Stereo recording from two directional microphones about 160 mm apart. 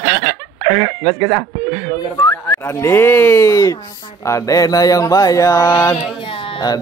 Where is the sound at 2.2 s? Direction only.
15° left (ahead or behind).